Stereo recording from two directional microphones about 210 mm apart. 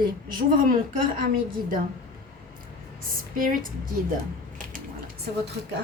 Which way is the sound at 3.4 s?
40° right (ahead or behind).